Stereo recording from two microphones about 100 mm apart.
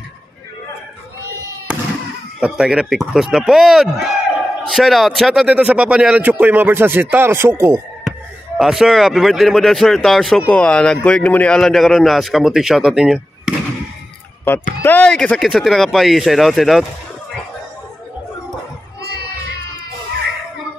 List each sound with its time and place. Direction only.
2.4 s a man's voice: 10° right (ahead or behind); by 7.8 s 25° right (ahead or behind)
8.5 s a man's voice: centre (ahead or behind)
14.4 s a man's voice: 20° left (ahead or behind); by 16.8 s centre (ahead or behind)